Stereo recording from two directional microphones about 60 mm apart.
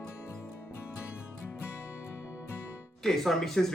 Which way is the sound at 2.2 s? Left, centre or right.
Right.